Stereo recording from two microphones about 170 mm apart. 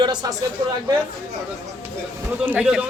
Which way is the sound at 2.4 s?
10° right (ahead or behind).